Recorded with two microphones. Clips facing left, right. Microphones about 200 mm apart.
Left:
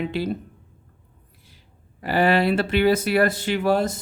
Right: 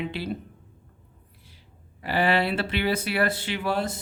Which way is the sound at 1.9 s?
45° left (ahead or behind).